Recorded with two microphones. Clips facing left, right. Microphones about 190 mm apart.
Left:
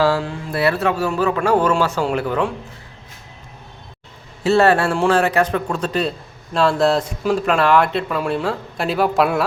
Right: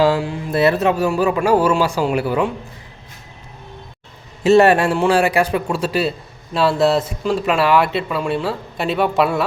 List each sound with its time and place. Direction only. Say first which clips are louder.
0.0 s speech: right 2 dB; 15° right (ahead or behind)
4.4 s a man's voice: right 3 dB; 15° right (ahead or behind); by 9.4 s centre (ahead or behind)